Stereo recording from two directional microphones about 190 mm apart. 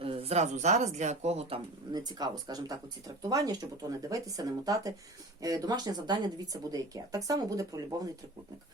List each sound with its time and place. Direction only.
0.0 s speech: 30° right (ahead or behind)